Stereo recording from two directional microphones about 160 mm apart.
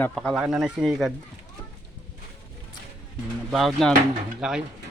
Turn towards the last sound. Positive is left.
turn(degrees=-5)  # may be behind; listen again after turning